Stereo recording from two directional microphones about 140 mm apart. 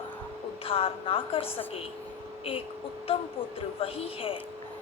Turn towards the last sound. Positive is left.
turn(degrees=40)  # may be behind; listen again after turning